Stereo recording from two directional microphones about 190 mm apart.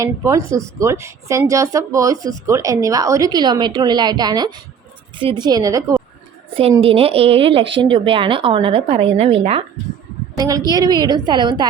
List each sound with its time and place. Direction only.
0.0 s a woman's voice: 15° right (ahead or behind)
6.5 s a woman's voice: 30° right (ahead or behind)
10.3 s a woman's voice: 20° right (ahead or behind)